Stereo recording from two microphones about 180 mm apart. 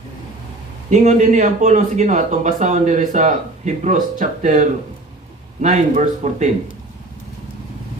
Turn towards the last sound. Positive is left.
turn(degrees=-40)  # may be behind; listen again after turning